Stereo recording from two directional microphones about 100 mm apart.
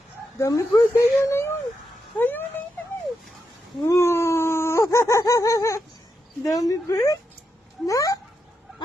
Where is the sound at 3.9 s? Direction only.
25° left (ahead or behind).